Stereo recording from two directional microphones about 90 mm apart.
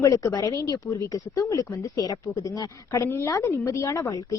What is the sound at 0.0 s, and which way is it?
Speech, 35° left (ahead or behind).